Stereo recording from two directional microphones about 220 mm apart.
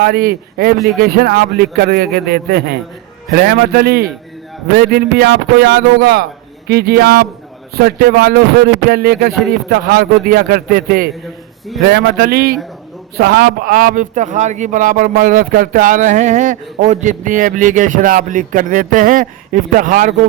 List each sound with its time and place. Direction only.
0.0 s a man's voice: 40° right (ahead or behind)